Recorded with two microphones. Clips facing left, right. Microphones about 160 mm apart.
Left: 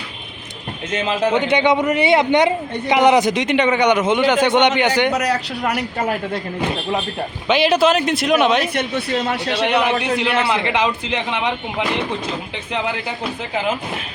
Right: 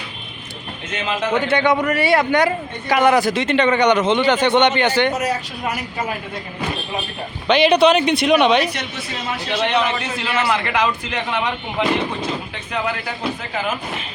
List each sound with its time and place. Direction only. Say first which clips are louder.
1.3 s a man's voice: even; 15° left (ahead or behind)
5.1 s a woman's voice: left 2 dB; 75° left (ahead or behind)
7.4 s speech: right 2 dB; 5° left (ahead or behind)
8.7 s a woman's voice: left 8 dB; 60° left (ahead or behind)
9.6 s a man's voice: left 3 dB; 10° left (ahead or behind)